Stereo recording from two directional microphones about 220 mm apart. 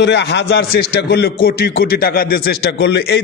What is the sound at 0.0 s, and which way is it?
A man's voice, 50° left (ahead or behind).